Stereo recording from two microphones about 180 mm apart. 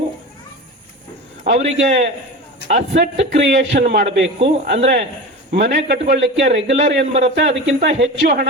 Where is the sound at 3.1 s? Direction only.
40° right (ahead or behind).